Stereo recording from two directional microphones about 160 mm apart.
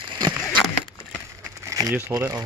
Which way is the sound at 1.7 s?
20° right (ahead or behind).